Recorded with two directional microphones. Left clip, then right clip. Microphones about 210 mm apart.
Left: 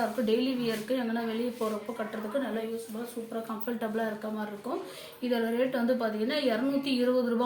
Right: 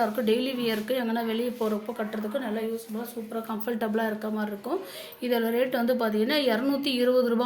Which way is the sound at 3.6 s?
45° right (ahead or behind).